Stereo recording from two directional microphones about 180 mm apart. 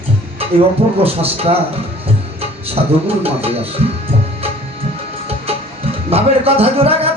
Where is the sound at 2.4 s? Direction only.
35° right (ahead or behind).